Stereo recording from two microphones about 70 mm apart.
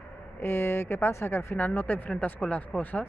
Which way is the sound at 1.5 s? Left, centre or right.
Left.